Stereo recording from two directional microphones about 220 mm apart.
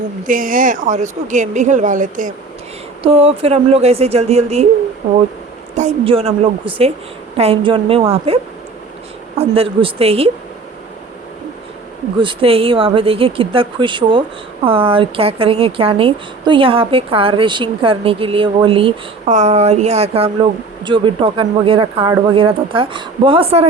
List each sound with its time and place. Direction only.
0.3 s speech: 40° right (ahead or behind)
3.0 s speech: 25° right (ahead or behind)
5.7 s speech: 30° right (ahead or behind)
9.4 s speech: 25° right (ahead or behind)
12.2 s speech: 25° right (ahead or behind)